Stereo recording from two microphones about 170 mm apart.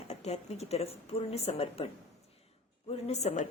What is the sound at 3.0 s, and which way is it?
Speech, 40° left (ahead or behind).